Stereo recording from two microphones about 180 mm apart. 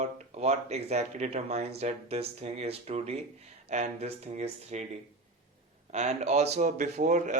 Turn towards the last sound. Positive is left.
turn(degrees=-40)  # may be behind; listen again after turning